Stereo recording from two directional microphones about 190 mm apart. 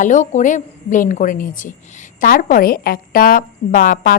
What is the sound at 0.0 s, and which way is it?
A woman's voice, 40° left (ahead or behind).